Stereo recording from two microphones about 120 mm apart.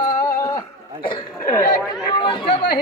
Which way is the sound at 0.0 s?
30° left (ahead or behind).